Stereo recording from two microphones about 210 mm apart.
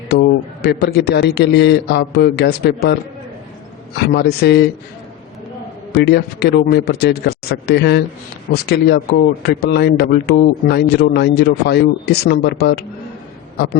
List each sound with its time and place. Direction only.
0.1 s speech: 50° left (ahead or behind)
5.9 s speech: 50° left (ahead or behind)